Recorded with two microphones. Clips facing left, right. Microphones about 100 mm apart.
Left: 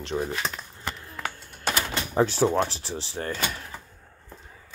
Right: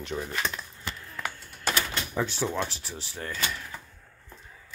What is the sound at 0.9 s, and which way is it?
Typewriter, 30° left (ahead or behind).